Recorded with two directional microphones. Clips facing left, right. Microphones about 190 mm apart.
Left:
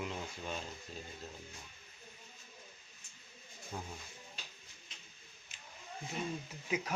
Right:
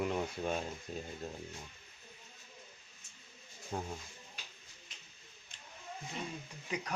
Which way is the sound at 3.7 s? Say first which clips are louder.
Right 5 dB; 55° right (ahead or behind).